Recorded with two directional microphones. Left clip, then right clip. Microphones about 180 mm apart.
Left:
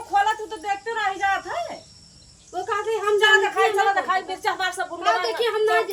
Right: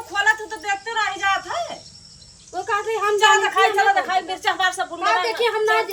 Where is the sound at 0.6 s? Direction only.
20° right (ahead or behind).